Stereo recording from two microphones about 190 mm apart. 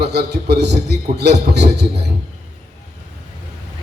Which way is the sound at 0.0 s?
60° right (ahead or behind).